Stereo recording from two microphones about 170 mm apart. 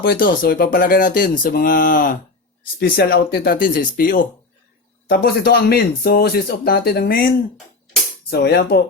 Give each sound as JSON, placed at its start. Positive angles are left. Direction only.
{"t": 0.0, "sound": "speech", "side_deg": 60}
{"t": 8.3, "sound": "speech", "side_deg": 70}